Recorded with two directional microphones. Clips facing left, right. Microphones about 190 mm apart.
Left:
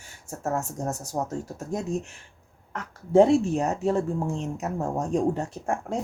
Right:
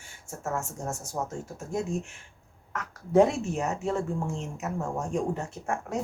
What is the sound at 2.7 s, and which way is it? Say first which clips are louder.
A woman's voice: left 3 dB; 30° left (ahead or behind).